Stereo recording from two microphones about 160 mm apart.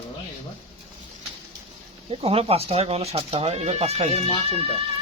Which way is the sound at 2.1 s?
35° right (ahead or behind).